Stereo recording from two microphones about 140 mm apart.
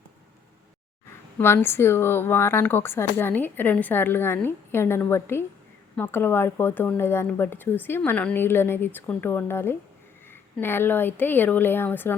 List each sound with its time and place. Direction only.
1.4 s speech: 15° left (ahead or behind)